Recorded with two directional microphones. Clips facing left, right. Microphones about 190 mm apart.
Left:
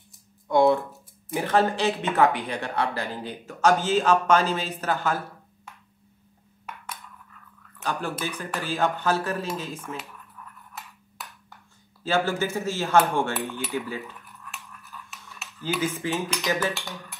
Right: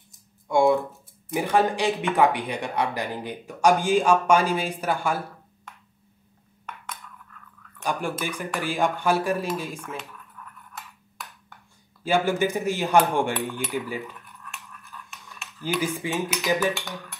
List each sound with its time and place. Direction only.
0.5 s a sound: 10° right (ahead or behind)
1.3 s speech: 10° right (ahead or behind)
7.8 s speech: 15° right (ahead or behind)
9.8 s dishes: 5° left (ahead or behind)
12.0 s speech: 15° right (ahead or behind)
14.4 s toothbrush: centre (ahead or behind)
15.4 s dishes: 5° left (ahead or behind)
15.8 s speech: 15° right (ahead or behind)
16.1 s dishes: 5° right (ahead or behind)